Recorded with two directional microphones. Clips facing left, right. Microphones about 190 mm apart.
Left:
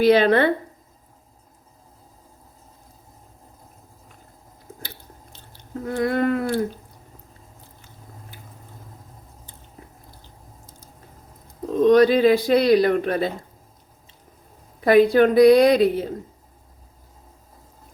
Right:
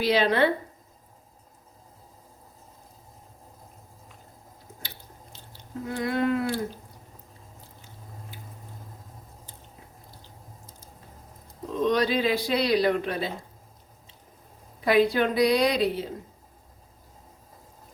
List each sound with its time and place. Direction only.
0.0 s speech: 55° left (ahead or behind)
5.3 s speech: 55° left (ahead or behind)
11.8 s speech: 50° left (ahead or behind)
14.8 s speech: 50° left (ahead or behind)